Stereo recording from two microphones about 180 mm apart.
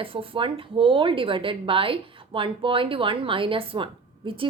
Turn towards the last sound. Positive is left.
turn(degrees=-30)  # may be behind; listen again after turning